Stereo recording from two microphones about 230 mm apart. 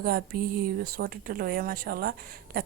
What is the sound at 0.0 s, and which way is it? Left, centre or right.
Speech, right.